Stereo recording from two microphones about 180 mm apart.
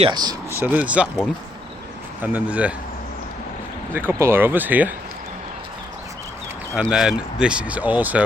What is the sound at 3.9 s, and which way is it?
Speech, 10° right (ahead or behind).